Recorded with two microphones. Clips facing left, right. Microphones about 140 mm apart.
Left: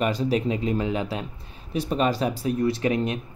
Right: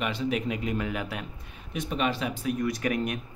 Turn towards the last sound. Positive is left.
turn(degrees=25)  # may be behind; listen again after turning